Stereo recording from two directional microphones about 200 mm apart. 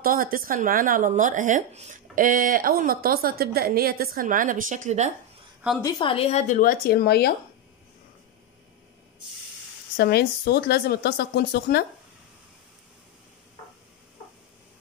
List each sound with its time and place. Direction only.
0.0 s speech: 45° right (ahead or behind)
5.8 s speech: 20° left (ahead or behind); by 7.3 s 55° left (ahead or behind)
9.9 s speech: 50° left (ahead or behind)